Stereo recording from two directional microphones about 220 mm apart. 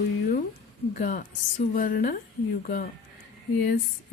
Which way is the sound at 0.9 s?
35° left (ahead or behind).